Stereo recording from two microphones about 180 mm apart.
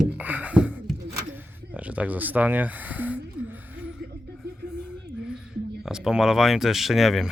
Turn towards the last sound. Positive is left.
turn(degrees=0)  # may be behind; listen again after turning